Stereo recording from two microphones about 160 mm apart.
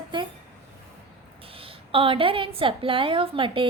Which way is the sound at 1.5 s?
35° right (ahead or behind).